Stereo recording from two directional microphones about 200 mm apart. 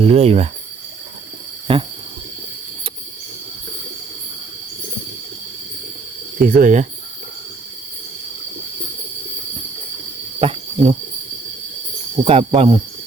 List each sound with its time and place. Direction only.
0.0 s speech: 30° right (ahead or behind)
1.7 s cricket: 25° right (ahead or behind)
6.4 s speech: 40° right (ahead or behind)
10.4 s a sound: 30° right (ahead or behind)
12.2 s cricket: 30° right (ahead or behind)